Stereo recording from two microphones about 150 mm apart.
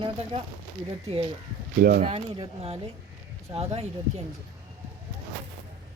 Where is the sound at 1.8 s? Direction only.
75° right (ahead or behind).